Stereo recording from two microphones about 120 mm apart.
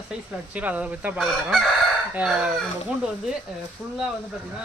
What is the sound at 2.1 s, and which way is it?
Speech, 10° right (ahead or behind).